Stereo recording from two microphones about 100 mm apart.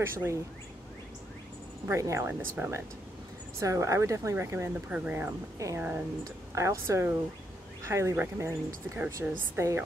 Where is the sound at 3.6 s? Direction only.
30° right (ahead or behind).